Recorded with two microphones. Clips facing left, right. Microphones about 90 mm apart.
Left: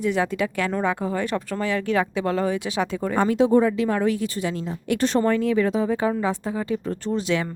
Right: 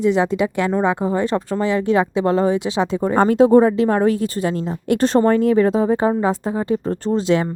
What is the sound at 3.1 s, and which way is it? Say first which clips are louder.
A woman's voice: right 6 dB; 40° right (ahead or behind).